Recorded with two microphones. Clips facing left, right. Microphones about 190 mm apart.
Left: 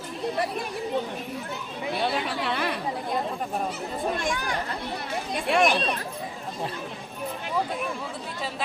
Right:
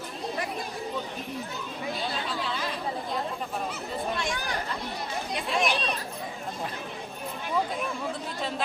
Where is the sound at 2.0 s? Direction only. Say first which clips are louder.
Left 8 dB; 65° left (ahead or behind).